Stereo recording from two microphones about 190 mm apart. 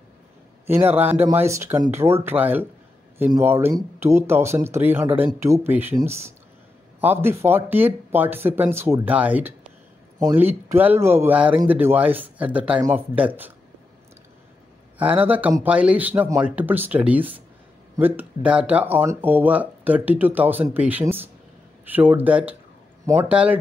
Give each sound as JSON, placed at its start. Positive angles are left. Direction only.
{"t": 0.7, "sound": "speech", "side_deg": -10}
{"t": 15.2, "sound": "speech", "side_deg": -10}